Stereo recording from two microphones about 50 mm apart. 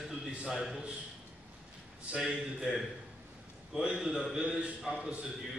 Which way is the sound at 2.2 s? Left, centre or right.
Centre.